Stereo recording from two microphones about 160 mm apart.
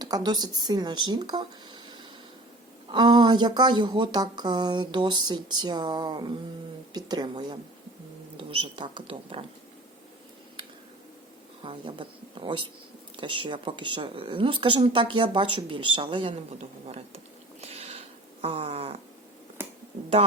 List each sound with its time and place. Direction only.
0.0 s a woman's voice: 25° right (ahead or behind)
11.9 s a woman's voice: 30° right (ahead or behind)
17.6 s a sound: 40° right (ahead or behind)
18.4 s a woman's voice: 35° right (ahead or behind)
19.6 s finger snapping: 15° right (ahead or behind)